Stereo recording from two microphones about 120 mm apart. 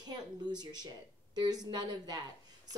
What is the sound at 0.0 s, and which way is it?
Speech, 35° right (ahead or behind).